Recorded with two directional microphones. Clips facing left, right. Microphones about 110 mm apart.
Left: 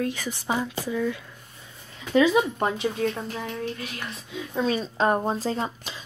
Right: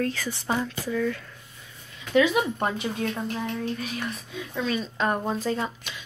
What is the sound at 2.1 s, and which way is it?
Speech, 30° left (ahead or behind).